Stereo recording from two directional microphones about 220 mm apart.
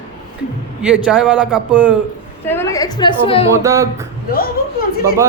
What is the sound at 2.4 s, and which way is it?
A woman's voice, 10° left (ahead or behind).